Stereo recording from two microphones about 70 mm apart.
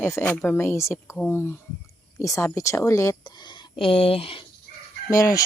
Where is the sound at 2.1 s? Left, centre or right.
Left.